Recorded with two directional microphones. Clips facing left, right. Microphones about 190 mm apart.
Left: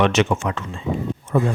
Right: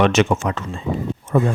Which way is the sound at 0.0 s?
45° right (ahead or behind).